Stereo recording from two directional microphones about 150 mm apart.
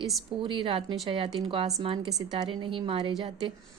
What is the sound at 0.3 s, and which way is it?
A woman's voice, 35° right (ahead or behind).